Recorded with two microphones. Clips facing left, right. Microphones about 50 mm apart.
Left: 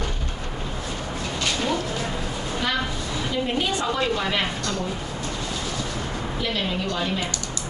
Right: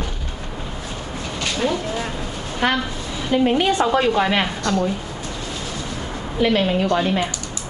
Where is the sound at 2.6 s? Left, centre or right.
Right.